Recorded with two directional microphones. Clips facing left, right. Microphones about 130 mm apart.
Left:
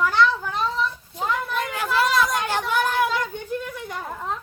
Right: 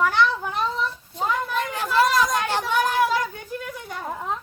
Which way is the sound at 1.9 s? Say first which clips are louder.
Right 2 dB; 35° right (ahead or behind).